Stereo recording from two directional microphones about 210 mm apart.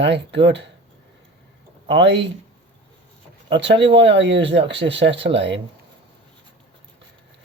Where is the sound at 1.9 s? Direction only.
55° right (ahead or behind).